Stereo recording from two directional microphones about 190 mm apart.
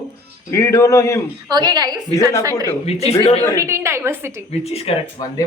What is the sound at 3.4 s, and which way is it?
Speech, 15° left (ahead or behind).